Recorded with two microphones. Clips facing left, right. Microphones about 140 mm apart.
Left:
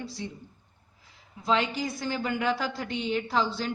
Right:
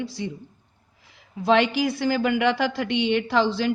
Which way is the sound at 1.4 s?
75° right (ahead or behind).